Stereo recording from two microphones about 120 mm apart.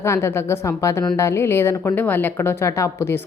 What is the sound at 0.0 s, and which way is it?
A woman's voice, 20° left (ahead or behind).